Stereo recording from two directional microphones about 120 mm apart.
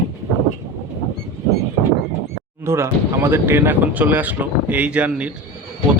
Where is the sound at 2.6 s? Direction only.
20° right (ahead or behind).